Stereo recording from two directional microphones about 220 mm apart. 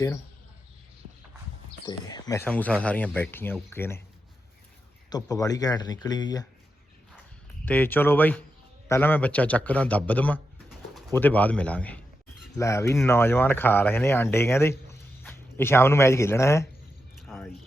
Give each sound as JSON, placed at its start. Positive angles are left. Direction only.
{"t": 1.9, "sound": "speech", "side_deg": 15}
{"t": 5.0, "sound": "speech", "side_deg": 15}
{"t": 7.6, "sound": "a man's voice", "side_deg": 10}
{"t": 17.2, "sound": "a sound", "side_deg": 0}